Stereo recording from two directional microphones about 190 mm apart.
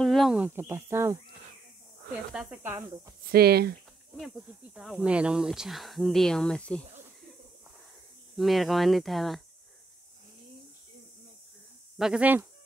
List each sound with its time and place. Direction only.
0.0 s speech: centre (ahead or behind)
2.3 s speech: 10° right (ahead or behind)
3.3 s speech: 55° right (ahead or behind)
4.2 s speech: centre (ahead or behind)
8.4 s speech: centre (ahead or behind)
12.0 s speech: 5° right (ahead or behind)